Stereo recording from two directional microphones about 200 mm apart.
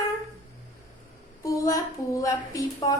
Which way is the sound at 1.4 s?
15° left (ahead or behind).